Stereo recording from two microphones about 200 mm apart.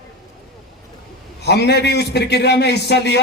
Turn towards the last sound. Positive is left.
turn(degrees=55)  # may be behind; listen again after turning